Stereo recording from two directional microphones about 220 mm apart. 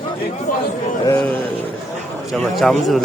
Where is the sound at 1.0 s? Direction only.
10° left (ahead or behind).